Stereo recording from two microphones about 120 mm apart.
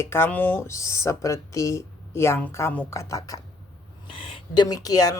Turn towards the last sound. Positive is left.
turn(degrees=30)  # may be behind; listen again after turning